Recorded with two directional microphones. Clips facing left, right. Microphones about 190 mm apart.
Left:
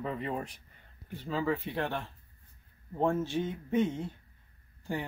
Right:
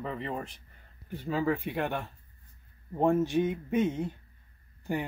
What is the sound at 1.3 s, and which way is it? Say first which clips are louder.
Speech: right 2 dB; 15° right (ahead or behind).